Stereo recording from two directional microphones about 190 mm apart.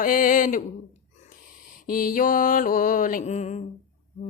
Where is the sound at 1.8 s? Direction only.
45° left (ahead or behind).